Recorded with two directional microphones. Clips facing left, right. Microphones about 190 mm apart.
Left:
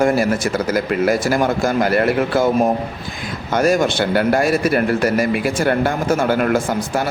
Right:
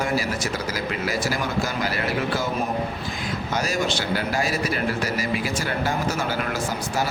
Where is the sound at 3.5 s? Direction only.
55° left (ahead or behind).